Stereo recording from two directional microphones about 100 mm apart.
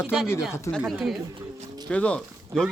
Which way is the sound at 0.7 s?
35° left (ahead or behind).